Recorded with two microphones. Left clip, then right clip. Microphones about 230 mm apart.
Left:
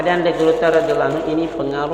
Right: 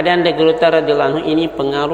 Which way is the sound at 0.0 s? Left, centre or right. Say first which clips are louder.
Right 3 dB; right.